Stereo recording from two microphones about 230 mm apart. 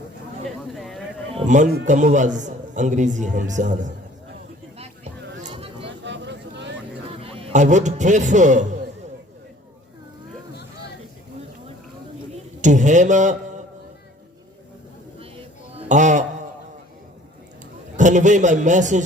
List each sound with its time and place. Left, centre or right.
0.7 s a sound: centre
1.4 s a man's voice: right
5.4 s a sound: right
6.1 s vehicle: right
7.2 s a man's voice: right
12.6 s a man's voice: right
15.7 s music: right
17.9 s a man's voice: right